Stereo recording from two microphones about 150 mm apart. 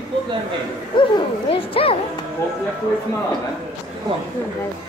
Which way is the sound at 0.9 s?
35° left (ahead or behind).